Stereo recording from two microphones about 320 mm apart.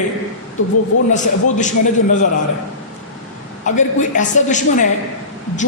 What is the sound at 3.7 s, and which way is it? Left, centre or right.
A man's voice, left.